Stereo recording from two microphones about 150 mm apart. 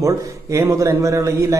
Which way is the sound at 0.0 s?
20° right (ahead or behind).